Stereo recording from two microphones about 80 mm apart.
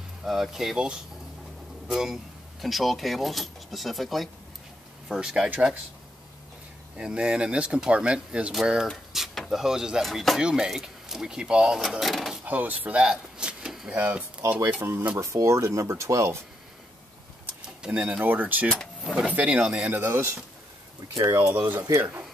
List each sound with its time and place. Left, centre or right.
0.2 s speech: centre
7.0 s speech: centre
12.4 s speech: right
13.0 s vehicle: centre
13.9 s speech: centre
14.8 s speech: right
17.6 s speech: centre
18.7 s power windows: centre
19.3 s speech: centre
19.9 s speech: right
21.5 s speech: right